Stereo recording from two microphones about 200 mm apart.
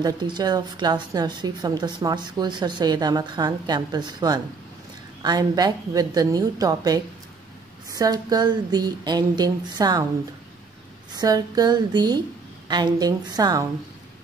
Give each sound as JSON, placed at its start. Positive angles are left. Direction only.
{"t": 0.0, "sound": "a woman's voice", "side_deg": -20}
{"t": 11.1, "sound": "a woman's voice", "side_deg": -20}